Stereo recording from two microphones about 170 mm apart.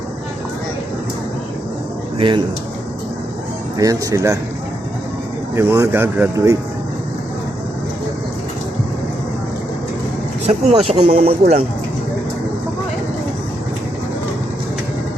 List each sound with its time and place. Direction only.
2.1 s speech: 30° right (ahead or behind)
3.8 s speech: 20° right (ahead or behind)
5.5 s speech: 15° right (ahead or behind)
10.4 s speech: 35° right (ahead or behind)